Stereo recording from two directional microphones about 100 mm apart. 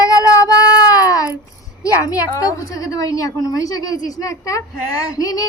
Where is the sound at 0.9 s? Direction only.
35° left (ahead or behind).